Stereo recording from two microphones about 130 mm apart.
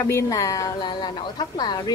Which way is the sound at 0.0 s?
25° left (ahead or behind).